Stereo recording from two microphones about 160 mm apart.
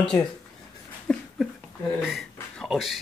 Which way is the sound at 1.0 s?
Centre (ahead or behind).